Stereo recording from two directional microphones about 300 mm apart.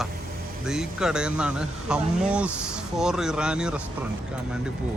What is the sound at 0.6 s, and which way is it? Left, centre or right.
Speech, centre.